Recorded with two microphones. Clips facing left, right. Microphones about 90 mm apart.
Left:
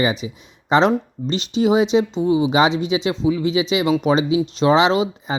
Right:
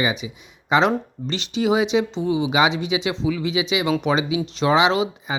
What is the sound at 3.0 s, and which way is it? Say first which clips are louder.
Speech: left 4 dB; 30° left (ahead or behind).